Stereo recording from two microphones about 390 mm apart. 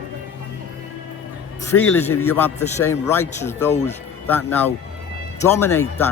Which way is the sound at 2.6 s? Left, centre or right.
Centre.